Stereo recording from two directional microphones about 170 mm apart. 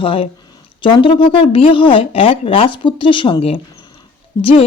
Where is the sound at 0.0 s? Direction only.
30° left (ahead or behind).